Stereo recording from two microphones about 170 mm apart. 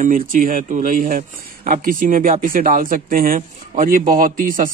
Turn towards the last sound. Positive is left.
turn(degrees=-55)  # may be behind; listen again after turning